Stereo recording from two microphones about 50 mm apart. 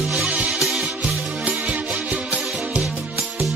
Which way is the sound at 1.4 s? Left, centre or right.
Right.